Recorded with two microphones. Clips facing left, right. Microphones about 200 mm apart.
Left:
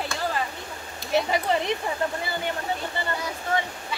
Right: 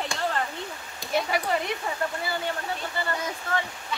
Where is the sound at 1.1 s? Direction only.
20° left (ahead or behind).